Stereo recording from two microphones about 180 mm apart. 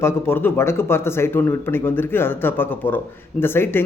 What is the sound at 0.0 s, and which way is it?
A man's voice, 10° left (ahead or behind).